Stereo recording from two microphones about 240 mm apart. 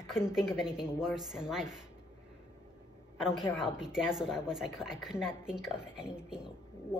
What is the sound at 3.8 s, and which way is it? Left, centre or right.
A woman's voice, centre.